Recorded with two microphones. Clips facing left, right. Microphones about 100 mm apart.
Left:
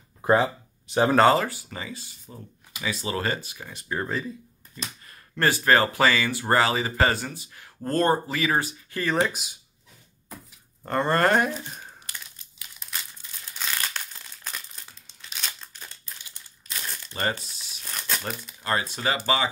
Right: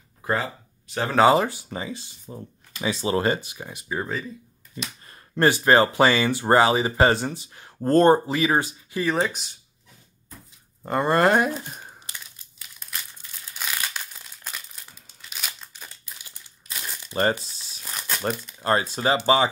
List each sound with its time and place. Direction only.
0.2 s a sound: 20° left (ahead or behind)
1.3 s speech: 20° right (ahead or behind)
3.9 s speech: 5° right (ahead or behind)
5.0 s speech: 25° right (ahead or behind)
9.0 s speech: centre (ahead or behind)
10.8 s speech: 10° right (ahead or behind)
13.9 s crumpling: 5° right (ahead or behind)
17.1 s speech: 35° right (ahead or behind)
17.9 s crumpling: 5° right (ahead or behind)
18.6 s speech: 35° right (ahead or behind)